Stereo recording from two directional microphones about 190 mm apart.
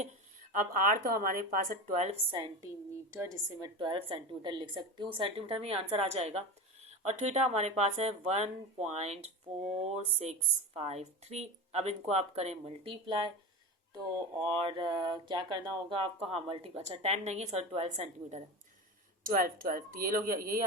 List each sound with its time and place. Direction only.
0.5 s speech: 45° right (ahead or behind)
2.3 s a woman's voice: 20° right (ahead or behind)
14.3 s speech: 25° right (ahead or behind)
19.3 s speech: 50° right (ahead or behind)